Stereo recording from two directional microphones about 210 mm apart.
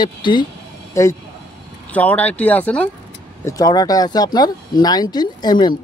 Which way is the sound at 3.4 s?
15° left (ahead or behind).